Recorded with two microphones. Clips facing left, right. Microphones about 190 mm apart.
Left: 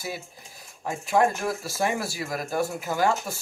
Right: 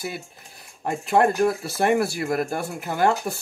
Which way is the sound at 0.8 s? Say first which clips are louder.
Right 3 dB; 60° right (ahead or behind).